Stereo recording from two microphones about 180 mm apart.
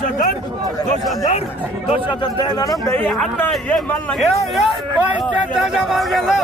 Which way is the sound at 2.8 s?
10° left (ahead or behind).